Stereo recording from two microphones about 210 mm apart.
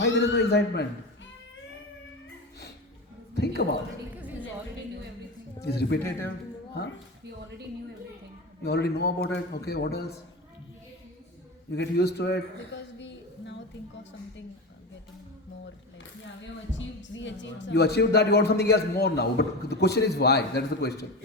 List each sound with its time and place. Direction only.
0.0 s speech: 55° left (ahead or behind)
3.3 s speech: 50° left (ahead or behind)
5.6 s speech: 50° left (ahead or behind)
8.6 s speech: 50° left (ahead or behind)
11.7 s a man's voice: 50° left (ahead or behind)
16.7 s speech: 60° left (ahead or behind)